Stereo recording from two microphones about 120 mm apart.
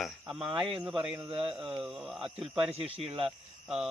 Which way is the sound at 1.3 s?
50° right (ahead or behind).